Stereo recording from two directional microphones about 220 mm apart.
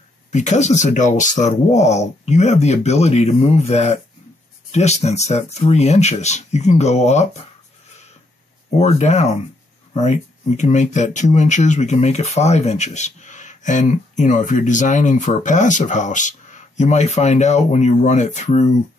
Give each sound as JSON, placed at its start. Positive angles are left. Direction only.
{"t": 0.3, "sound": "speech", "side_deg": 30}
{"t": 8.6, "sound": "speech", "side_deg": 30}
{"t": 10.6, "sound": "speech", "side_deg": 30}